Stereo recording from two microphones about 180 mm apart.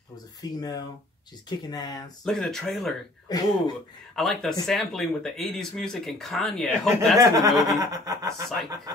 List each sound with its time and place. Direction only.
0.4 s speech: 20° left (ahead or behind)
2.2 s speech: centre (ahead or behind)
3.3 s speech: 20° left (ahead or behind)
4.1 s speech: centre (ahead or behind)
7.2 s speech: 20° right (ahead or behind)